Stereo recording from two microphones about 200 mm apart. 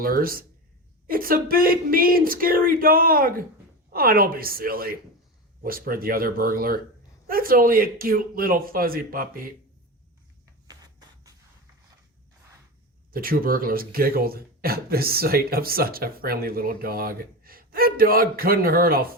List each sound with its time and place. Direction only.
0.0 s speech: 45° right (ahead or behind)
10.7 s a sound: 20° right (ahead or behind)
13.1 s speech: 45° right (ahead or behind)